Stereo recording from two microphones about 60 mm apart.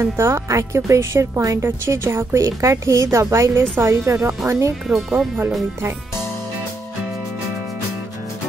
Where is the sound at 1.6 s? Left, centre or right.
Right.